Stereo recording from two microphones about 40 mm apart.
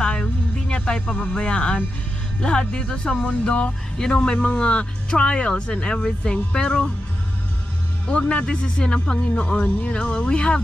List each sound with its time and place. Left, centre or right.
0.0 s music: left
2.4 s speech: left
4.0 s speech: left
8.1 s speech: left